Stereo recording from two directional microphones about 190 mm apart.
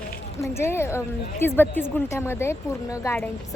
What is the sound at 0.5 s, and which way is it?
Speech, 15° left (ahead or behind).